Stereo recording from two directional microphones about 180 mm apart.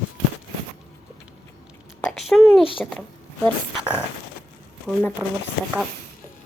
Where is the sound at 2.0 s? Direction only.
Centre (ahead or behind).